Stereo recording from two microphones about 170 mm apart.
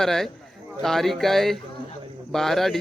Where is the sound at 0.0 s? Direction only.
5° left (ahead or behind).